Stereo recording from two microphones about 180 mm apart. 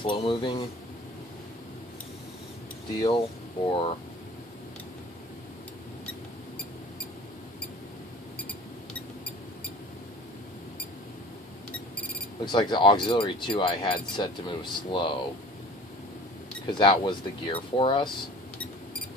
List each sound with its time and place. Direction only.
0.0 s speech: 25° left (ahead or behind)
3.0 s speech: 30° left (ahead or behind)
12.4 s speech: 25° left (ahead or behind)
16.6 s speech: 25° left (ahead or behind)